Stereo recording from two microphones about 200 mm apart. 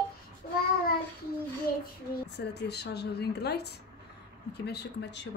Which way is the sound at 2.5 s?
55° left (ahead or behind).